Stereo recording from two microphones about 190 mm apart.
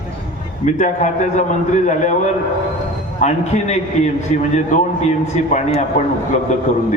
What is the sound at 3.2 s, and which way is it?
Speech, 35° left (ahead or behind).